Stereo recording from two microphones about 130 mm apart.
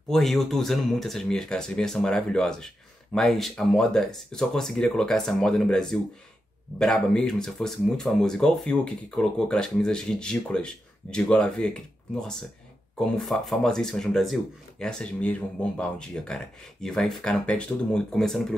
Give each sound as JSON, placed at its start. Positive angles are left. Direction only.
{"t": 0.1, "sound": "speech", "side_deg": 0}